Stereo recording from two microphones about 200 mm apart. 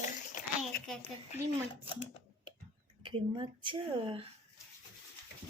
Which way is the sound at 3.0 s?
25° right (ahead or behind).